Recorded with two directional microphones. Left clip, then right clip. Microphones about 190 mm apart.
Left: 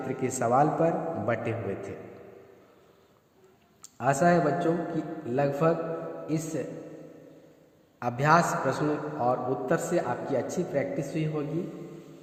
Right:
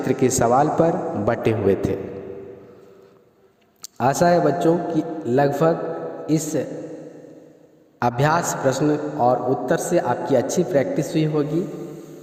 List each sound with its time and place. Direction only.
0.1 s a man's voice: 45° right (ahead or behind)
3.8 s a man's voice: 45° right (ahead or behind)
7.9 s a man's voice: 40° right (ahead or behind)